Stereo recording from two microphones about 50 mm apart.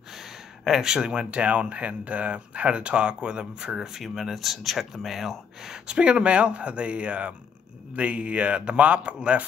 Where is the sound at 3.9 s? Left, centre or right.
Centre.